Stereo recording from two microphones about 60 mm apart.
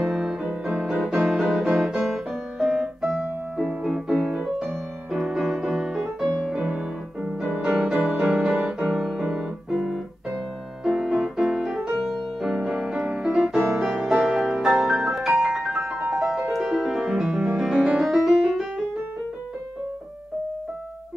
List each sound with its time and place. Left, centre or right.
0.0 s piano: centre
1.2 s music: centre
5.1 s music: centre
6.2 s music: centre
6.5 s music: centre
9.7 s keyboard: centre
12.0 s music: centre